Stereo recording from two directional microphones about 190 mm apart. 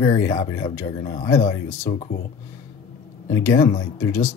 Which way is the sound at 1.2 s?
15° left (ahead or behind).